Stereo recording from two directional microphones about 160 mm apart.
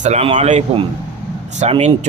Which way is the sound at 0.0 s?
45° right (ahead or behind).